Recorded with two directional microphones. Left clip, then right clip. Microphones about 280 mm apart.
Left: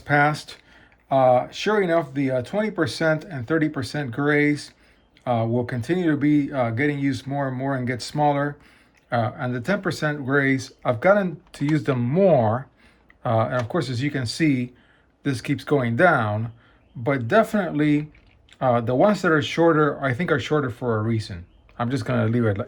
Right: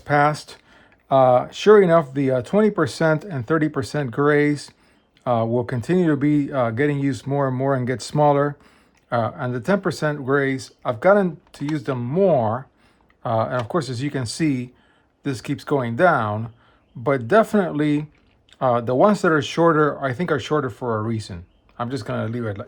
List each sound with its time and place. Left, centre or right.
0.0 s speech: centre